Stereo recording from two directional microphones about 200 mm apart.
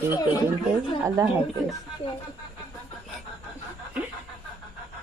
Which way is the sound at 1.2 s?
15° right (ahead or behind).